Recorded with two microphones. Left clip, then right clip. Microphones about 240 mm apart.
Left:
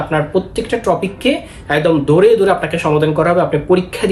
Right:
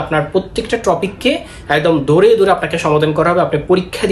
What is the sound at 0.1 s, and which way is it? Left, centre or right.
Speech, centre.